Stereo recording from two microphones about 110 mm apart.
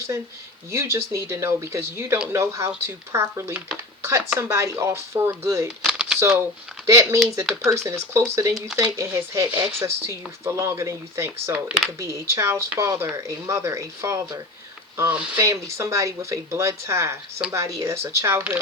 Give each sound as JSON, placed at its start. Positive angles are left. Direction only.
{"t": 0.7, "sound": "speech", "side_deg": -25}
{"t": 5.6, "sound": "a sound", "side_deg": -5}
{"t": 6.8, "sound": "speech", "side_deg": -30}
{"t": 8.5, "sound": "speech", "side_deg": -5}
{"t": 9.0, "sound": "speech", "side_deg": -25}
{"t": 14.9, "sound": "speech", "side_deg": -15}
{"t": 15.4, "sound": "speech", "side_deg": -25}